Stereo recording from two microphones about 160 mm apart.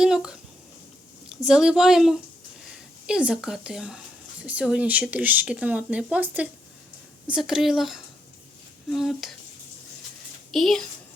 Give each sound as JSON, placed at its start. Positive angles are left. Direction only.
{"t": 0.0, "sound": "speech", "side_deg": -5}
{"t": 1.5, "sound": "speech", "side_deg": -5}
{"t": 10.5, "sound": "speech", "side_deg": 0}